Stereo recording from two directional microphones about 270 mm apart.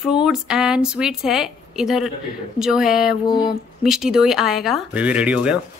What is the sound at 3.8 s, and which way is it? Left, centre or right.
Speech, centre.